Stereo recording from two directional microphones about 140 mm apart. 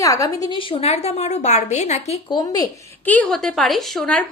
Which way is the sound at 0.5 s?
45° left (ahead or behind).